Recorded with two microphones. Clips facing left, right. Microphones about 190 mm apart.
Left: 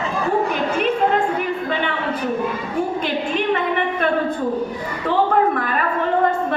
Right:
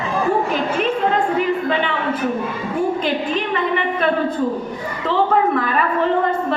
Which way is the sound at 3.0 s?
55° left (ahead or behind).